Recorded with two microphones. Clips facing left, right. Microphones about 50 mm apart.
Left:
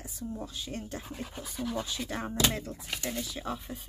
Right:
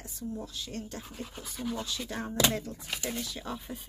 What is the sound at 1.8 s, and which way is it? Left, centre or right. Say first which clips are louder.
Speech: left 1 dB; centre.